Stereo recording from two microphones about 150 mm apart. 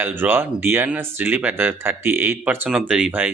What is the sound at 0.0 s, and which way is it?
Speech, 15° right (ahead or behind).